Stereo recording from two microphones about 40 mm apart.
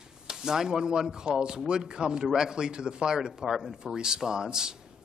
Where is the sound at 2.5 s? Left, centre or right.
Right.